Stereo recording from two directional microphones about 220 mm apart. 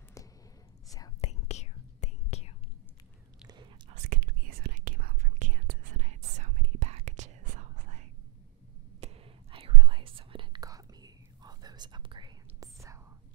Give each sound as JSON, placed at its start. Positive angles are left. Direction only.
{"t": 0.8, "sound": "whispering", "side_deg": 15}
{"t": 1.2, "sound": "whispering", "side_deg": 30}
{"t": 3.9, "sound": "whispering", "side_deg": -40}